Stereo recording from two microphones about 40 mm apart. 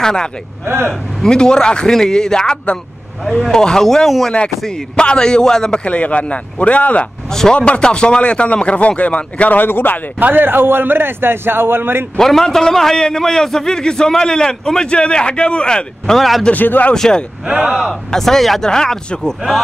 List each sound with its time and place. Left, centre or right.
0.0 s a man's voice: centre
4.6 s speech: left
5.9 s a man's voice: left
7.2 s speech: centre
7.5 s a man's voice: left
9.6 s speech: left
10.1 s a man's voice: right
12.2 s a man's voice: centre
16.2 s a man's voice: centre
16.5 s a man's voice: left
16.9 s a man's voice: centre
17.5 s speech: right
18.1 s a man's voice: centre
18.6 s a man's voice: centre